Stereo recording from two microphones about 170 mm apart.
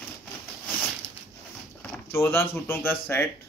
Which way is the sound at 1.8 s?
10° left (ahead or behind).